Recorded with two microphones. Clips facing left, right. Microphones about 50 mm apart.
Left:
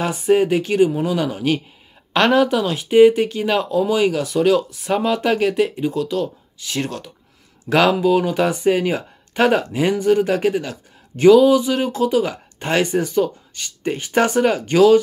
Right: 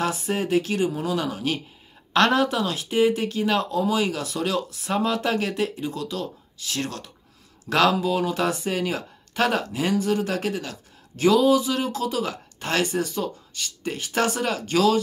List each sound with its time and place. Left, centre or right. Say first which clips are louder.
0.5 s speech: left 6 dB; left
2.1 s speech: left 4 dB; left